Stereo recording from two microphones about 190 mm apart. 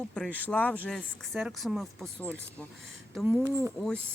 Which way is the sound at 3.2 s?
5° right (ahead or behind).